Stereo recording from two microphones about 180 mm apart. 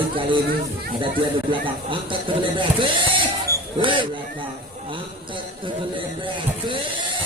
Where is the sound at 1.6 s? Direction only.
30° right (ahead or behind).